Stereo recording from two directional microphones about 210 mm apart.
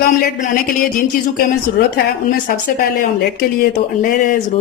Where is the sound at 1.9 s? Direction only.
40° left (ahead or behind).